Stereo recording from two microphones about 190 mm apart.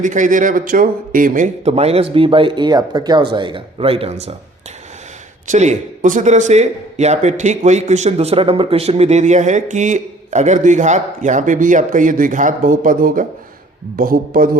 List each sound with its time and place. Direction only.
0.0 s a man's voice: 40° right (ahead or behind)
5.5 s a man's voice: 40° right (ahead or behind)